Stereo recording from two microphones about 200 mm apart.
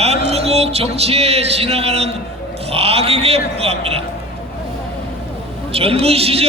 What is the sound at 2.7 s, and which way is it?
Speech, 30° right (ahead or behind).